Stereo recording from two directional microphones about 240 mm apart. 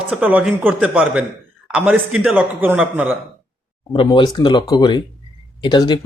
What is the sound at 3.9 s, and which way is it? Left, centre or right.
Speech, centre.